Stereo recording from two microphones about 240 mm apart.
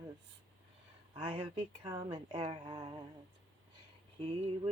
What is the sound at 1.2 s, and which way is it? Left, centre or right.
Speech, right.